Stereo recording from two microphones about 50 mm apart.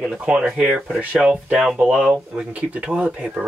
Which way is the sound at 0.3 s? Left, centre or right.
Centre.